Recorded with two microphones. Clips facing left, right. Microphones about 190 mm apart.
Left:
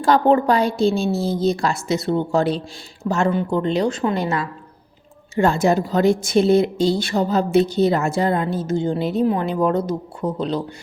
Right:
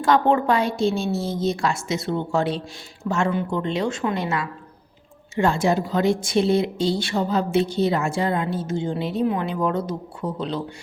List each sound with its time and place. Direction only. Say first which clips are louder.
0.0 s speech: left 3 dB; 35° left (ahead or behind)